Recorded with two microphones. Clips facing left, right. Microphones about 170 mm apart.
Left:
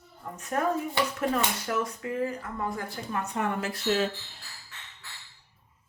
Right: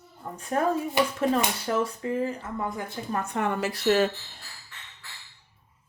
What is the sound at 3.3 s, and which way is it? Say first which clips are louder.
Speech: right 3 dB; 70° right (ahead or behind).